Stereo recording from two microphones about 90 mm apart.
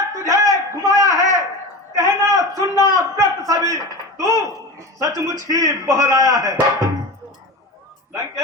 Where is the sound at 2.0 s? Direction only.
40° right (ahead or behind).